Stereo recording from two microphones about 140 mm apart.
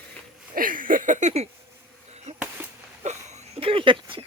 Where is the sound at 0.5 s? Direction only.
80° right; by 1.5 s 50° right (ahead or behind).